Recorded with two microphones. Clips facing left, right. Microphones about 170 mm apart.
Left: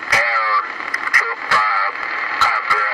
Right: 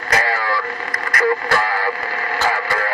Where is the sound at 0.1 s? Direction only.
50° right (ahead or behind).